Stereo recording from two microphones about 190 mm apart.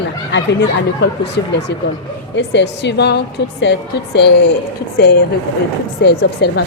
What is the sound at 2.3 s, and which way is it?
A woman's voice, 65° left (ahead or behind).